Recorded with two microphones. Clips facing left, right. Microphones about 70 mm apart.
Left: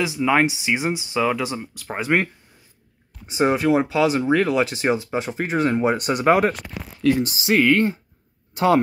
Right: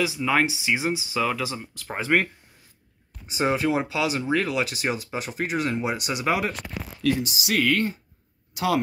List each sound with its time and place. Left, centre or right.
0.2 s speech: centre
3.3 s speech: left